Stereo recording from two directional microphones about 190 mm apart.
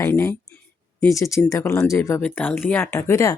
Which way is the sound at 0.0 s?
15° left (ahead or behind).